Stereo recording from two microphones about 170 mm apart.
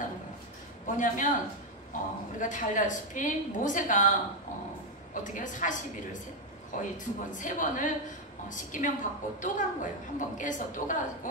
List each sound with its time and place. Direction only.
0.8 s a woman's voice: 50° left (ahead or behind)
5.1 s a woman's voice: 50° left (ahead or behind)